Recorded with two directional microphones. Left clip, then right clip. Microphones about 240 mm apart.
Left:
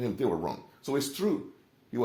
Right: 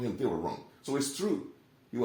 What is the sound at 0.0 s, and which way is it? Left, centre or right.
Speech, left.